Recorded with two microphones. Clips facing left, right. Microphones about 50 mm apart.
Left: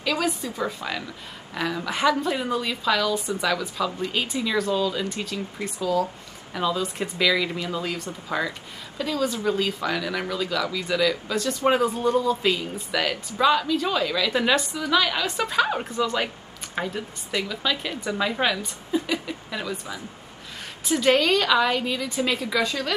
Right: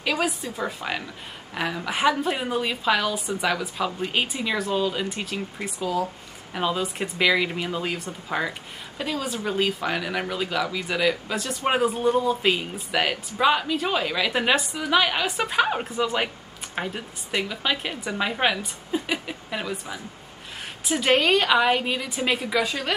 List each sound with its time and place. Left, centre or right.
0.2 s frog: centre
0.7 s a woman's voice: right